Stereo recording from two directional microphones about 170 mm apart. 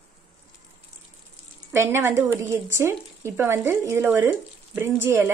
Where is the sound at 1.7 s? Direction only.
15° right (ahead or behind).